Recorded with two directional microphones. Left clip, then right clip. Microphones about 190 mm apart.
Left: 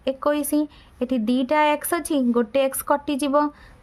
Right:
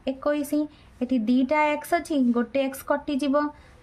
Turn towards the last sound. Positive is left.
turn(degrees=40)  # may be behind; listen again after turning